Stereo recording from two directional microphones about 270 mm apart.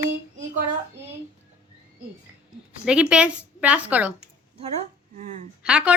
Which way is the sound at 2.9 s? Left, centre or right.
Centre.